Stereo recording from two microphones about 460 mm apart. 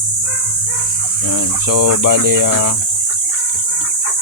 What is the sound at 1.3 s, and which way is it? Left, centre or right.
Speech, right.